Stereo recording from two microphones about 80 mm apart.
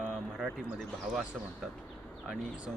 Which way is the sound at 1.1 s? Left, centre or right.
Right.